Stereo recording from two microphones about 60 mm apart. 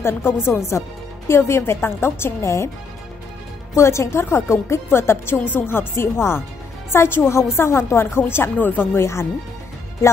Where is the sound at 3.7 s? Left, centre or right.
Left.